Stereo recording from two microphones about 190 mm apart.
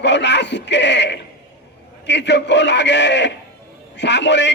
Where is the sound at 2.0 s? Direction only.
70° left (ahead or behind).